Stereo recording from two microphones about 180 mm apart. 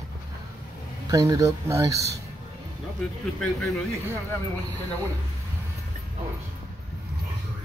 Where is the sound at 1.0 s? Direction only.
20° right (ahead or behind).